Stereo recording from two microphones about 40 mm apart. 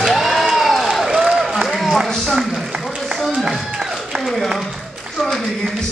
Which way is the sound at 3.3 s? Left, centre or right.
Centre.